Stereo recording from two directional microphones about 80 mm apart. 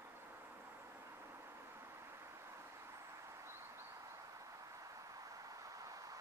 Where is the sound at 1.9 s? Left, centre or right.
Right.